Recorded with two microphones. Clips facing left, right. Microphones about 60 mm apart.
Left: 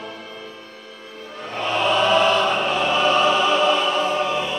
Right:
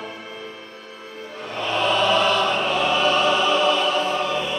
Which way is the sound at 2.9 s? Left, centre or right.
Left.